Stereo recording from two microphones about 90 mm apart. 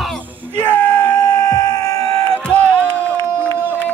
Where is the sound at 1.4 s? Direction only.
40° left (ahead or behind).